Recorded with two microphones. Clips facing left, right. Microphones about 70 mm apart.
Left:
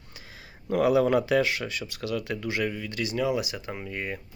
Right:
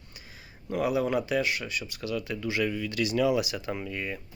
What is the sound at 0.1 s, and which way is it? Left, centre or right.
Speech, left.